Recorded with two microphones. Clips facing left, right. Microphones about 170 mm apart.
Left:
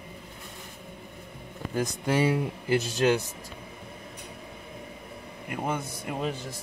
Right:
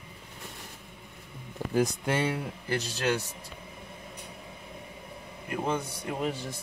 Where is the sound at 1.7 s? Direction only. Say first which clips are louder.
Even; centre (ahead or behind).